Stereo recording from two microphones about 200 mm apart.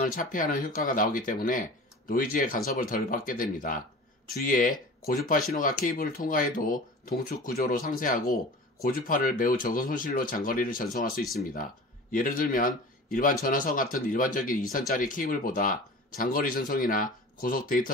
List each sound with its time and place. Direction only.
0.0 s speech: 45° left (ahead or behind)